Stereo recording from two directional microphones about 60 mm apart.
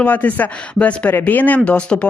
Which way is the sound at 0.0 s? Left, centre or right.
Left.